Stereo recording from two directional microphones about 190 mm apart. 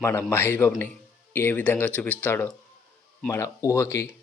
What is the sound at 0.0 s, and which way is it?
Speech, 15° left (ahead or behind).